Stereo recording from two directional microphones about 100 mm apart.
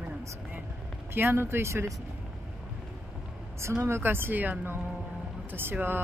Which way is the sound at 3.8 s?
25° right (ahead or behind).